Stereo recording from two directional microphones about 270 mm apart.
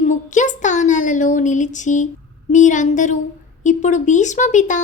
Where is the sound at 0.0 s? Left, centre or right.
Left.